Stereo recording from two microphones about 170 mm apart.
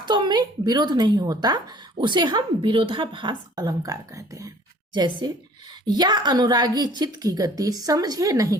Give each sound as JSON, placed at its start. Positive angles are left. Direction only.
{"t": 0.0, "sound": "speech", "side_deg": -25}